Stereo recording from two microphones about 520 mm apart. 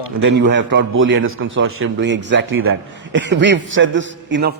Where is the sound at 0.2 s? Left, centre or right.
Right.